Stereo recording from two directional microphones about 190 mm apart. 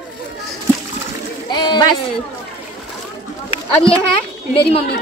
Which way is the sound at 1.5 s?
20° left (ahead or behind).